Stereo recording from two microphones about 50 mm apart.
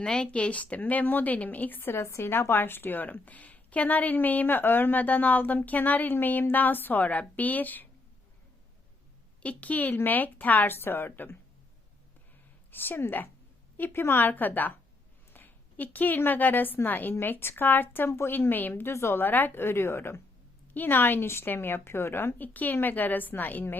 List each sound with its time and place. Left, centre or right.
0.0 s a woman's voice: centre; by 1.8 s left
1.8 s a woman's voice: left
9.4 s a woman's voice: left
9.9 s a woman's voice: left
12.7 s a woman's voice: left
20.7 s a woman's voice: left
22.4 s a woman's voice: left